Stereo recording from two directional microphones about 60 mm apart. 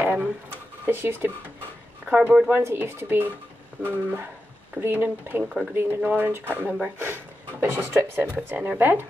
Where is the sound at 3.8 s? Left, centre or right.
Right.